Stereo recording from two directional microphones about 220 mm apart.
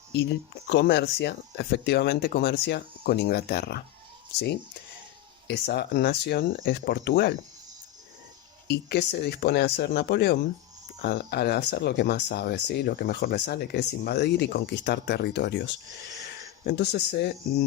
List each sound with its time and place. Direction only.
0.1 s speech: 50° left (ahead or behind)
5.5 s speech: 50° left (ahead or behind)
8.6 s speech: 50° left (ahead or behind)